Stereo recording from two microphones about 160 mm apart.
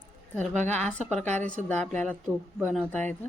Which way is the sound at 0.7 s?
10° left (ahead or behind).